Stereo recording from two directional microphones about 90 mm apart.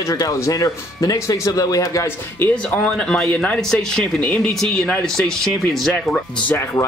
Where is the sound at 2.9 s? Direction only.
10° left (ahead or behind).